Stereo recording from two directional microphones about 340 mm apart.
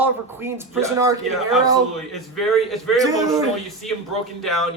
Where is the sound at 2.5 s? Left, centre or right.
Centre.